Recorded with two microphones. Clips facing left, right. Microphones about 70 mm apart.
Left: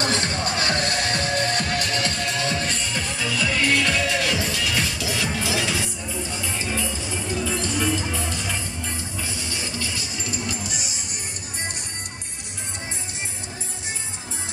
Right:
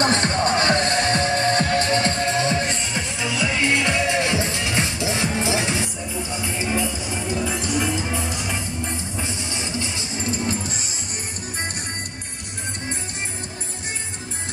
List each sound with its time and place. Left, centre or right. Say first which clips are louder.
0.0 s music: right 5 dB; right